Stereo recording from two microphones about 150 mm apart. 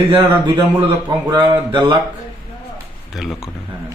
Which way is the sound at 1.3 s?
30° right (ahead or behind).